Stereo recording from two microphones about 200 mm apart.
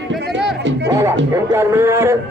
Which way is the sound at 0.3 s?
60° right (ahead or behind).